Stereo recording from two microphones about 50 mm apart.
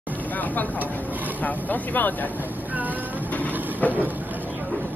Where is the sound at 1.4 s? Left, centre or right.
Left.